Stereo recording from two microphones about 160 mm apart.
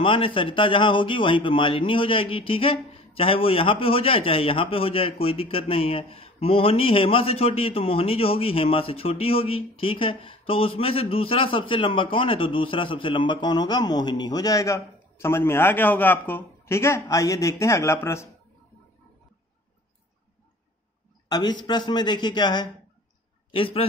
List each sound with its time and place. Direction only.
0.0 s a man's voice: 35° left (ahead or behind); by 18.3 s 15° left (ahead or behind)
21.3 s a man's voice: 25° left (ahead or behind)